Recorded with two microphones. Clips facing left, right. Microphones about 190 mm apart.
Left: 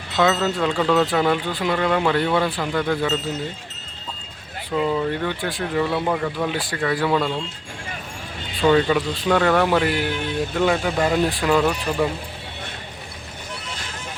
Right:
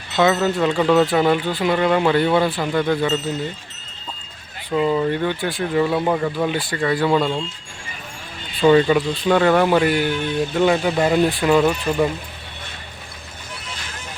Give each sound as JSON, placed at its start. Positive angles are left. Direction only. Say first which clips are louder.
{"t": 0.1, "sound": "speech", "louder": "right 2 dB", "side_deg": 0}
{"t": 4.7, "sound": "speech", "louder": "right 3 dB", "side_deg": -5}
{"t": 5.8, "sound": "speech", "louder": "right 3 dB", "side_deg": -10}
{"t": 6.5, "sound": "speech", "louder": "right 2 dB", "side_deg": 0}
{"t": 7.2, "sound": "speech", "louder": "right 3 dB", "side_deg": -25}
{"t": 8.6, "sound": "speech", "louder": "right 3 dB", "side_deg": -5}